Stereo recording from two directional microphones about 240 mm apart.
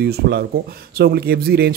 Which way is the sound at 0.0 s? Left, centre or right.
Right.